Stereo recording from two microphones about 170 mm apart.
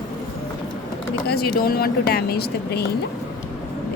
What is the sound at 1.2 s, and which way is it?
Speech, 65° left (ahead or behind).